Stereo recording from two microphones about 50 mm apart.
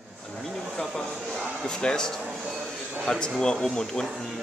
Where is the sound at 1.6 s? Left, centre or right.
Centre.